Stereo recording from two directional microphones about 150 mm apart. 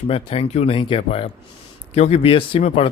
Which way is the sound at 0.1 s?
40° left (ahead or behind).